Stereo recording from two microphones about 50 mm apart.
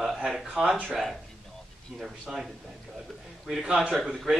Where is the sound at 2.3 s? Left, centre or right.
Centre.